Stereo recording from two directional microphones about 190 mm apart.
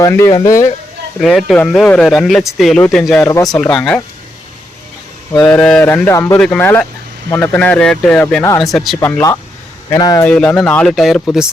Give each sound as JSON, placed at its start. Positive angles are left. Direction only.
{"t": 0.0, "sound": "speech", "side_deg": 15}
{"t": 1.2, "sound": "speech", "side_deg": 0}
{"t": 3.2, "sound": "speech", "side_deg": 20}
{"t": 3.6, "sound": "speech", "side_deg": 5}
{"t": 5.3, "sound": "speech", "side_deg": 15}
{"t": 9.0, "sound": "speech", "side_deg": 10}
{"t": 10.2, "sound": "speech", "side_deg": 5}